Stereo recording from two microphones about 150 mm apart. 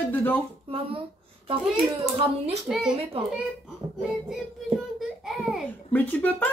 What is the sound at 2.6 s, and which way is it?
Child singing, centre (ahead or behind).